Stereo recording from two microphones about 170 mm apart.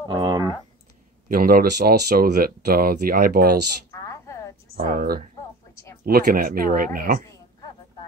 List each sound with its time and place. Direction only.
0.1 s clicking: 25° right (ahead or behind)
1.3 s speech: 60° right (ahead or behind)
3.9 s a sound: 15° left (ahead or behind)
4.7 s speech: 40° right (ahead or behind)
6.0 s speech: 60° right (ahead or behind)